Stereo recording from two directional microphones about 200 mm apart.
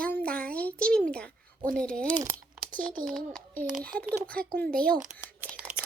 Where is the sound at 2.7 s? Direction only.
40° right (ahead or behind).